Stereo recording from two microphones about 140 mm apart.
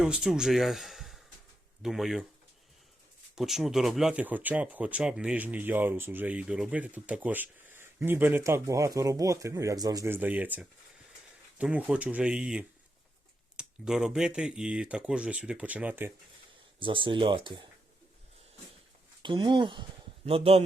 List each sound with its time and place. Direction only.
0.0 s speech: 5° right (ahead or behind)
3.3 s speech: centre (ahead or behind); by 10.2 s 25° right (ahead or behind)
10.2 s speech: 10° right (ahead or behind)
16.8 s speech: 35° right (ahead or behind)
19.2 s a man's voice: 35° right (ahead or behind)